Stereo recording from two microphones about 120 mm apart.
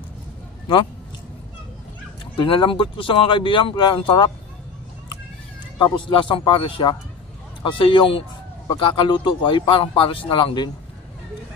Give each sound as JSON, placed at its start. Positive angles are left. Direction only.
{"t": 2.3, "sound": "speech", "side_deg": 45}
{"t": 5.8, "sound": "speech", "side_deg": 40}